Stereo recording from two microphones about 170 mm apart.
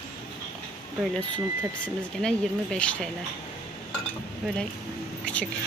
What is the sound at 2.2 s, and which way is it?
Speech, 5° left (ahead or behind).